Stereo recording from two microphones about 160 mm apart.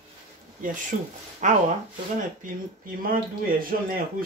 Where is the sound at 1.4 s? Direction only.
50° right (ahead or behind).